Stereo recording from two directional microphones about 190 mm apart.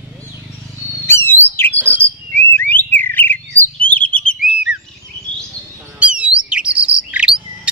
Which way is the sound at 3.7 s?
5° left (ahead or behind).